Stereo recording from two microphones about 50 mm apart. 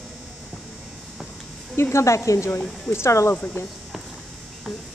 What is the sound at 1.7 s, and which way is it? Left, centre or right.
A woman's voice, left.